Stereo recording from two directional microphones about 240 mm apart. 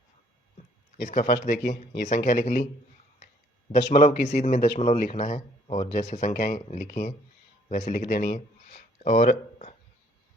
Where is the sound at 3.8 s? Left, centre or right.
Left.